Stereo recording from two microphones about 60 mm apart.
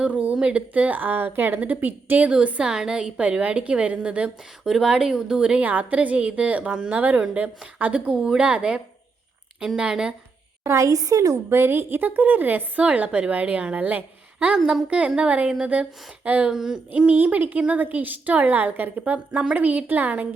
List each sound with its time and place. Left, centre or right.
0.0 s a sound: right
0.3 s a woman's voice: right
4.6 s a woman's voice: centre; by 7.9 s right
7.9 s a woman's voice: centre
10.6 s a woman's voice: right
11.4 s a woman's voice: right
12.8 s a woman's voice: right
16.5 s a woman's voice: centre
16.9 s a woman's voice: right